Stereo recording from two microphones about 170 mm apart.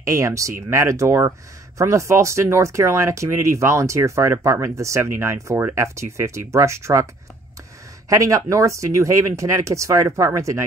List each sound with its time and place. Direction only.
0.0 s speech: 20° right (ahead or behind)
8.1 s speech: 20° right (ahead or behind)